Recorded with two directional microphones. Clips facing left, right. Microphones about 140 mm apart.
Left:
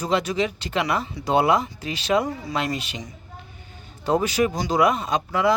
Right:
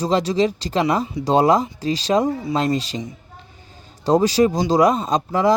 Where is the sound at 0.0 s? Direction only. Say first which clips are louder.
Right 5 dB; 35° right (ahead or behind).